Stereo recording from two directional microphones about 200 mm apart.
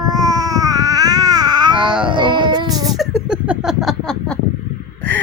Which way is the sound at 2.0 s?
25° right (ahead or behind).